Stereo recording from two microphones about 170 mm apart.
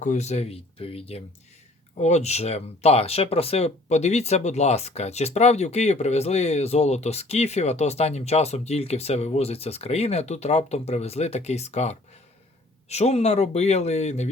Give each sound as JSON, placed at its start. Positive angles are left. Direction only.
{"t": 0.0, "sound": "speech", "side_deg": 45}